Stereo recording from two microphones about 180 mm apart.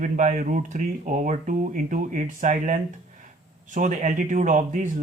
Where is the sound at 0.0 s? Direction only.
45° right (ahead or behind).